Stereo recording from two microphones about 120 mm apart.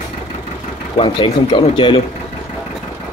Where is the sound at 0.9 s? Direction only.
45° left (ahead or behind).